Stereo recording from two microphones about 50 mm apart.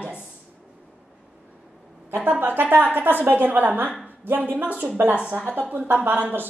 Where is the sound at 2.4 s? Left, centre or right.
Right.